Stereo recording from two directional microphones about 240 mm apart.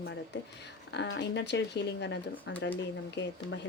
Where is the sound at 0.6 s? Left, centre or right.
Left.